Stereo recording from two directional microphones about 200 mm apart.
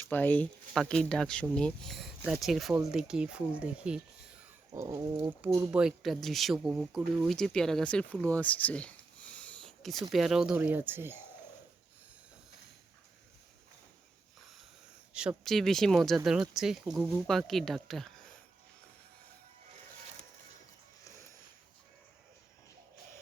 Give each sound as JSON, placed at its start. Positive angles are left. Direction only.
{"t": 0.1, "sound": "speech", "side_deg": 10}
{"t": 4.7, "sound": "speech", "side_deg": -15}
{"t": 5.8, "sound": "speech", "side_deg": 0}
{"t": 9.4, "sound": "sniff", "side_deg": 5}
{"t": 10.1, "sound": "speech", "side_deg": 0}
{"t": 15.1, "sound": "speech", "side_deg": -5}